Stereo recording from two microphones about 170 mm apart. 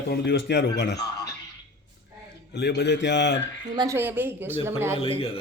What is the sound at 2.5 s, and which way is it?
Speech, 75° left (ahead or behind).